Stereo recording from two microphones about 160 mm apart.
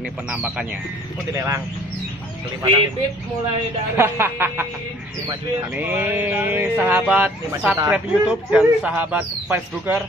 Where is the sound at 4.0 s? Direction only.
15° right (ahead or behind).